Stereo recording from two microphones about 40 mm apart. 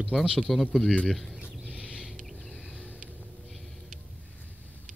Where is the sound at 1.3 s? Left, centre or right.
Right.